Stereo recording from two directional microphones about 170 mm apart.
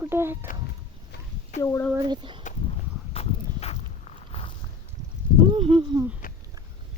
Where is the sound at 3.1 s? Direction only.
35° left (ahead or behind).